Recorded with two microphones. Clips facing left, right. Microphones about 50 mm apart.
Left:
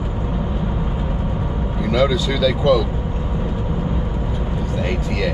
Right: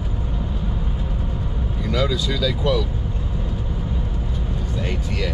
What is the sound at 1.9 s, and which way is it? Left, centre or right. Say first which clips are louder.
Speech: left 5 dB; centre.